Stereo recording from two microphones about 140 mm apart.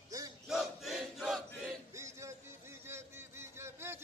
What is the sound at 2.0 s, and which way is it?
Music, 20° right (ahead or behind).